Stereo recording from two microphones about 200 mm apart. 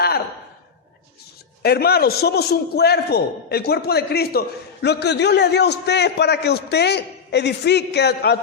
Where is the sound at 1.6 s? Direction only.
50° left (ahead or behind).